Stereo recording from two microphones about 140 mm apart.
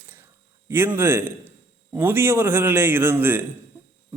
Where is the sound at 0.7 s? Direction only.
15° right (ahead or behind).